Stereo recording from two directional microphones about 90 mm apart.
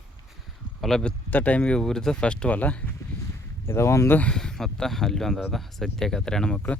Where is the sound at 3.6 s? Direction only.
30° left (ahead or behind).